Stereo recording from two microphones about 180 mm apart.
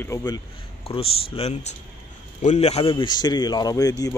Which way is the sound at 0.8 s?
30° left (ahead or behind).